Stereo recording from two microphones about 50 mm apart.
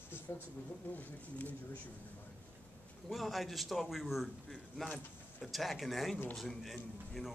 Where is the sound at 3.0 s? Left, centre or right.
Centre.